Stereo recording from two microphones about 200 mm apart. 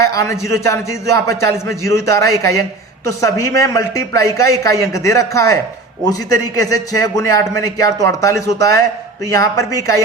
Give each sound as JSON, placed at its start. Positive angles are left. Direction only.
{"t": 0.0, "sound": "a man's voice", "side_deg": 15}